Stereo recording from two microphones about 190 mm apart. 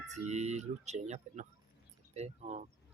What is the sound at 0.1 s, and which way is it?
Speech, 35° right (ahead or behind).